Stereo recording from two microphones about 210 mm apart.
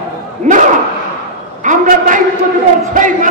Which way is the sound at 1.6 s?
40° right (ahead or behind).